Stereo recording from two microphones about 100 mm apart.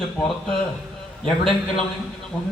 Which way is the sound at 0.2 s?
10° left (ahead or behind).